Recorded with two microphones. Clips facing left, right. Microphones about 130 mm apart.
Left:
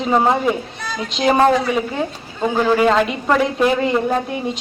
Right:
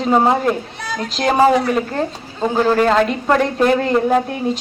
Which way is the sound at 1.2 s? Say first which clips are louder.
Right 1 dB; centre (ahead or behind).